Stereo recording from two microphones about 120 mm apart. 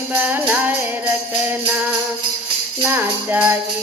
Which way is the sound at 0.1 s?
15° right (ahead or behind).